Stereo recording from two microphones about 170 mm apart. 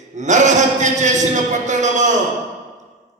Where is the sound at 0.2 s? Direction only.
45° right (ahead or behind).